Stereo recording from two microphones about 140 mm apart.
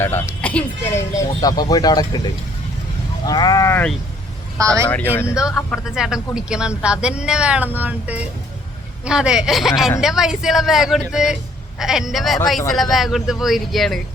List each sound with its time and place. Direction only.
0.4 s speech: 15° left (ahead or behind)
4.9 s speech: 15° left (ahead or behind)
5.4 s speech: centre (ahead or behind)